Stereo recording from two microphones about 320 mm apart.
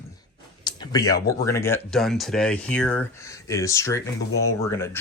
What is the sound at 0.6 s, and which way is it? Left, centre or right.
Speech, centre.